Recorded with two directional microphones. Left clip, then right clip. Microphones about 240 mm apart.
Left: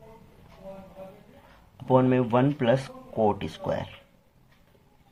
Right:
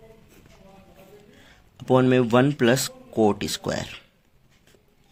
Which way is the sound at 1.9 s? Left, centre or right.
Right.